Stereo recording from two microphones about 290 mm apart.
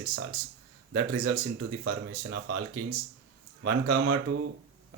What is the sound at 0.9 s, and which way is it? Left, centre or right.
Speech, right.